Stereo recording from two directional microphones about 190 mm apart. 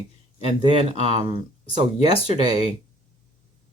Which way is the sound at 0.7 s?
35° right (ahead or behind).